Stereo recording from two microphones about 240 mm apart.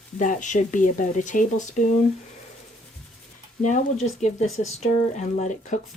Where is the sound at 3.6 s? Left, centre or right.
Left.